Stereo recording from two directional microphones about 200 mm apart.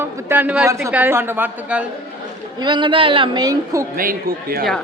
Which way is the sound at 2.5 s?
20° right (ahead or behind).